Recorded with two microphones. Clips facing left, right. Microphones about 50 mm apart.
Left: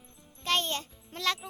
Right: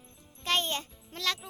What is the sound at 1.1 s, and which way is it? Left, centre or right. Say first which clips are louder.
Speech: left 2 dB; centre.